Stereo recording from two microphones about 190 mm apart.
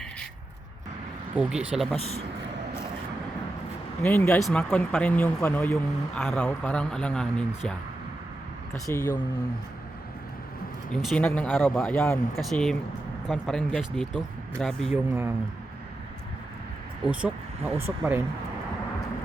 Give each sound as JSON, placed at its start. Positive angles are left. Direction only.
{"t": 1.4, "sound": "a man's voice", "side_deg": -5}
{"t": 4.0, "sound": "a man's voice", "side_deg": 10}
{"t": 4.4, "sound": "a man's voice", "side_deg": 0}
{"t": 8.9, "sound": "a man's voice", "side_deg": 15}
{"t": 10.9, "sound": "a man's voice", "side_deg": 0}
{"t": 11.9, "sound": "a man's voice", "side_deg": 15}
{"t": 12.4, "sound": "a man's voice", "side_deg": 0}
{"t": 17.1, "sound": "speech", "side_deg": -5}